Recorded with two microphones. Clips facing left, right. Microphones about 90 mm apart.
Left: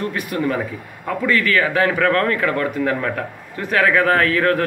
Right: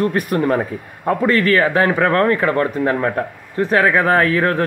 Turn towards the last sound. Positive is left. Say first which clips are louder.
# right 1 dB
turn(degrees=-25)  # may be behind; listen again after turning